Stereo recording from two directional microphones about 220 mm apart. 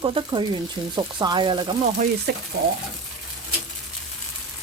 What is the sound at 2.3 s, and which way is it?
Speech, 50° right (ahead or behind).